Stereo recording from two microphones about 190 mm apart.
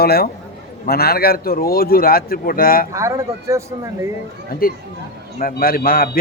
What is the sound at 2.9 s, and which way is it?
Speech, 15° right (ahead or behind).